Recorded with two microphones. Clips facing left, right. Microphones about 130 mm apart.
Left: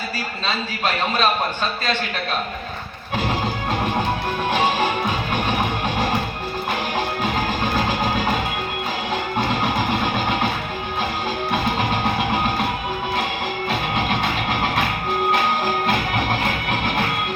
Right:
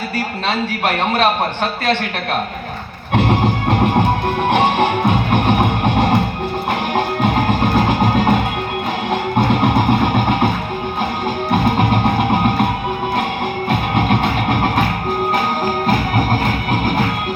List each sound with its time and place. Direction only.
0.4 s a man's voice: 60° right (ahead or behind)
3.2 s music: 60° right (ahead or behind)
9.5 s music: 55° right (ahead or behind)
11.5 s music: 50° right (ahead or behind)
13.7 s music: 50° right (ahead or behind)
15.9 s music: 40° right (ahead or behind)